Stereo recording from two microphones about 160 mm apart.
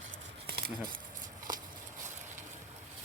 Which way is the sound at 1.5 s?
60° right (ahead or behind).